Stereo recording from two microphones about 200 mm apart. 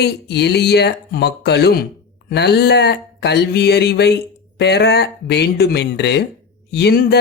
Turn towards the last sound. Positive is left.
turn(degrees=55)  # may be behind; listen again after turning